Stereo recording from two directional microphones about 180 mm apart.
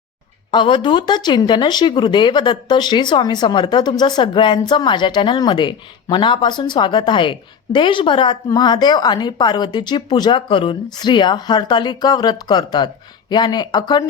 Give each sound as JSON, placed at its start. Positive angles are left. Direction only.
{"t": 0.5, "sound": "speech", "side_deg": 25}